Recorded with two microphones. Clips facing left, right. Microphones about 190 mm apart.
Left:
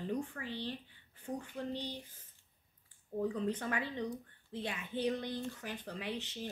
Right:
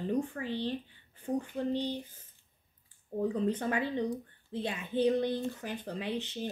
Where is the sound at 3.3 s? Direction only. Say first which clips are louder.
Right 5 dB; 30° right (ahead or behind).